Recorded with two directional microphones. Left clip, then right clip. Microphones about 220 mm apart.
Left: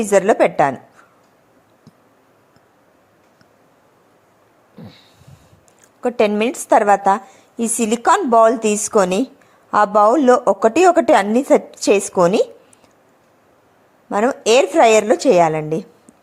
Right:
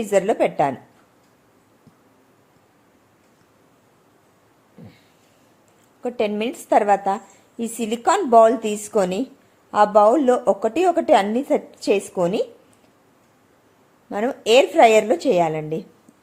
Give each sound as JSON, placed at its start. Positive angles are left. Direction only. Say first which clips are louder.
{"t": 0.0, "sound": "a woman's voice", "louder": "left 5 dB", "side_deg": 15}
{"t": 4.8, "sound": "a sound", "louder": "left 6 dB", "side_deg": 10}
{"t": 6.0, "sound": "a woman's voice", "louder": "left 7 dB", "side_deg": 15}
{"t": 14.1, "sound": "a woman's voice", "louder": "left 3 dB", "side_deg": 15}